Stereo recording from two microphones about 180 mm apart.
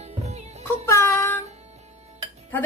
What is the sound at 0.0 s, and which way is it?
Music, 35° right (ahead or behind).